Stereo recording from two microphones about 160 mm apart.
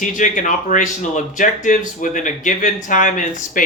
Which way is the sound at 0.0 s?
55° left (ahead or behind).